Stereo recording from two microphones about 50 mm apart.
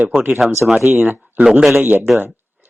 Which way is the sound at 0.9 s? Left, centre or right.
Right.